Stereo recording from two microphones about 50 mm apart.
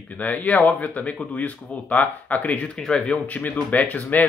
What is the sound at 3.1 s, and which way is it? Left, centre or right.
A man's voice, left.